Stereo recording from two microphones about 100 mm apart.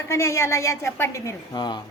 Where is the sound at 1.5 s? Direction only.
50° left (ahead or behind).